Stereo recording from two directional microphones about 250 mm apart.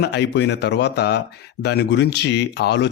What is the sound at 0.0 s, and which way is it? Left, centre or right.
Speech, left.